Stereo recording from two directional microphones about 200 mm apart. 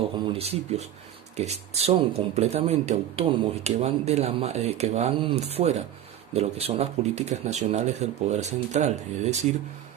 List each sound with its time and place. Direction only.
0.3 s speech: 30° right (ahead or behind)